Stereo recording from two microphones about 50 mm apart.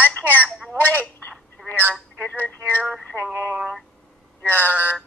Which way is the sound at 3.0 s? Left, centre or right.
Left.